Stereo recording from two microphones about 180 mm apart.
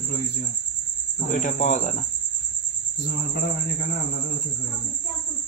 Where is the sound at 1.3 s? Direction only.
45° left (ahead or behind).